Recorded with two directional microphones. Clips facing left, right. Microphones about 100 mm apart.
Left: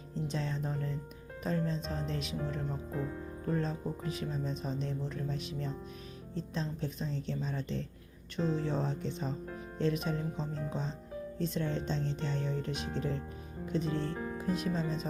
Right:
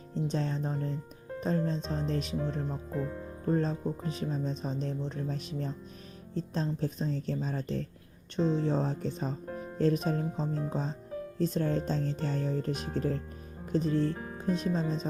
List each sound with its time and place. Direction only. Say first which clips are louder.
0.1 s speech: right 4 dB; 35° right (ahead or behind)
3.4 s speech: right 5 dB; 35° right (ahead or behind)
13.9 s speech: right 6 dB; 30° left (ahead or behind)
14.3 s speech: right 2 dB; 35° right (ahead or behind)